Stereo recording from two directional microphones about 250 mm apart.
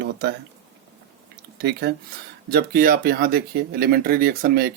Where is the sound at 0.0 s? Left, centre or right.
Right.